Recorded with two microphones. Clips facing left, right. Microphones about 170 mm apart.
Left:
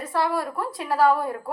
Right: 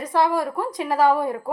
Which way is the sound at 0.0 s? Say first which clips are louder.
Right 4 dB; 15° right (ahead or behind).